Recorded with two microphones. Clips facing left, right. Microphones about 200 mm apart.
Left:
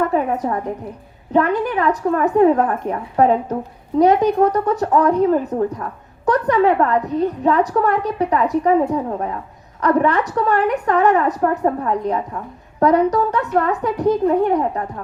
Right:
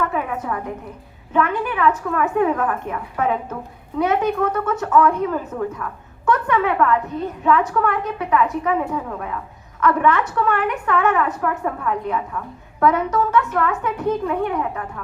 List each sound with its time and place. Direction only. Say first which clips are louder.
0.0 s a woman's voice: left 5 dB; 35° left (ahead or behind)